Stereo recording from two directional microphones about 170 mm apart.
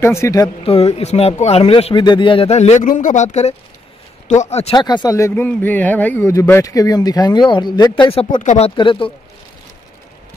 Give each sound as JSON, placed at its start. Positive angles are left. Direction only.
{"t": 0.0, "sound": "speech", "side_deg": 15}
{"t": 0.7, "sound": "speech", "side_deg": 35}
{"t": 4.7, "sound": "speech", "side_deg": 25}
{"t": 8.3, "sound": "speech", "side_deg": 45}